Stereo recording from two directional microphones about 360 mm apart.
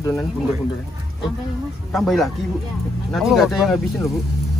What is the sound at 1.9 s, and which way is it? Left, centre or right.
Speech, centre.